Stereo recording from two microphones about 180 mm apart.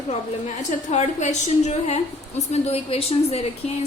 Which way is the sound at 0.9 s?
40° left (ahead or behind).